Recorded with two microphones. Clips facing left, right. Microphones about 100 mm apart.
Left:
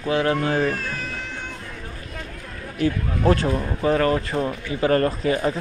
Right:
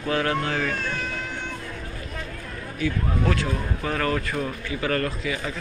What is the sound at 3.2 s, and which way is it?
Speech, 30° left (ahead or behind).